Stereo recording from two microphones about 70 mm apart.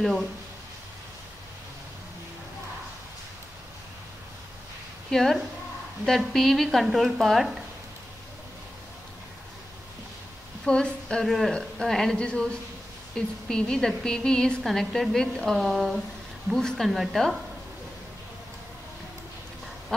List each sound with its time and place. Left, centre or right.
0.0 s speech: centre
5.1 s speech: centre
10.6 s speech: centre
11.2 s a woman's voice: centre
19.9 s speech: centre